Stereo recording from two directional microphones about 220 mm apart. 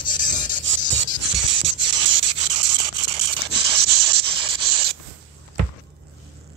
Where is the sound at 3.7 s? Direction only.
50° right (ahead or behind).